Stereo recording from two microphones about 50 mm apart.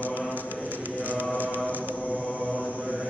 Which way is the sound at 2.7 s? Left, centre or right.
Right.